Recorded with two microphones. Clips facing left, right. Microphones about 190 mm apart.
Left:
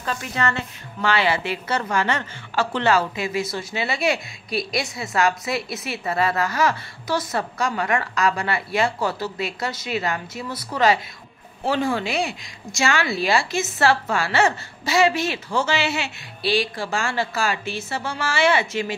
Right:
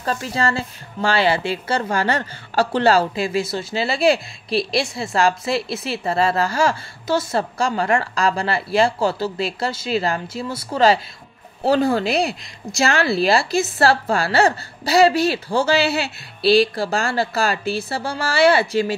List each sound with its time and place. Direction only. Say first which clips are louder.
0.0 s a woman's voice: right 3 dB; 35° right (ahead or behind)